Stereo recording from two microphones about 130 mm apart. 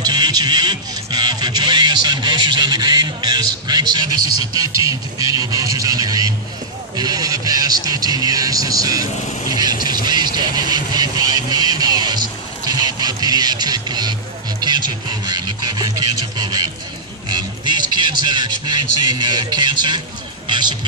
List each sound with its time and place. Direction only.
0.0 s music: 30° right (ahead or behind)
9.8 s a sound: 90° left
10.0 s vehicle: 35° right (ahead or behind)
14.6 s music: 35° right (ahead or behind)